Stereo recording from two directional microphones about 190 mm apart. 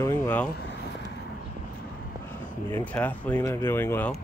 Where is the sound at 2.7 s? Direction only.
10° left (ahead or behind).